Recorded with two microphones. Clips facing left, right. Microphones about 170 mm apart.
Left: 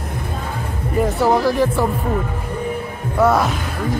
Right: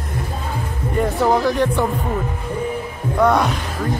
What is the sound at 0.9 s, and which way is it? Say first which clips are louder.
Speech: left 1 dB; 5° left (ahead or behind).